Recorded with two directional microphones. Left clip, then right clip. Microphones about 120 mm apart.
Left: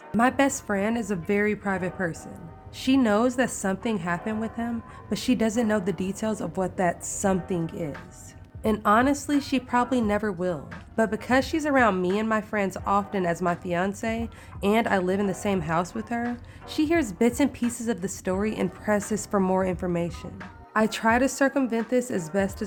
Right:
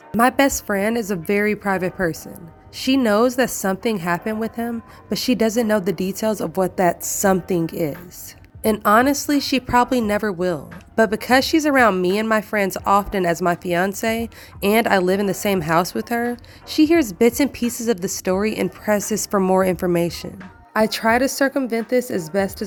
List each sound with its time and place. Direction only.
0.2 s a woman's voice: 45° right (ahead or behind)
8.6 s a woman's voice: 45° right (ahead or behind)
16.6 s a woman's voice: 30° right (ahead or behind)
19.5 s a woman's voice: 50° right (ahead or behind)
20.7 s speech: 30° right (ahead or behind)